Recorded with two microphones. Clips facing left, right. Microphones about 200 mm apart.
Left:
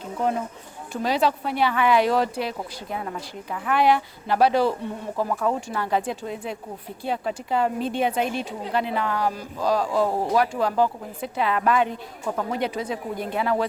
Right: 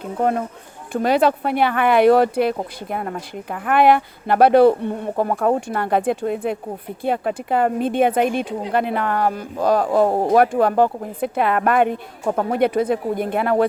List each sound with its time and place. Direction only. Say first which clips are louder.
0.2 s speech: right 5 dB; 55° right (ahead or behind)